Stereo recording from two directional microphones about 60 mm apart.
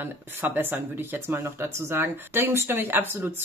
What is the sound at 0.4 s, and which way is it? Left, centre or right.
Speech, right.